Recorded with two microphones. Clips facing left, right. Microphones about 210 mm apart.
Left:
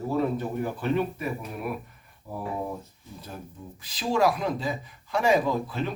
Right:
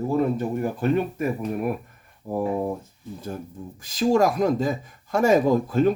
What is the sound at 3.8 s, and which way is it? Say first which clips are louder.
Speech: right 5 dB; 45° right (ahead or behind).